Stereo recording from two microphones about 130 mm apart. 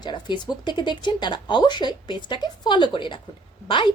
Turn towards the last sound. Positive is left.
turn(degrees=40)  # may be behind; listen again after turning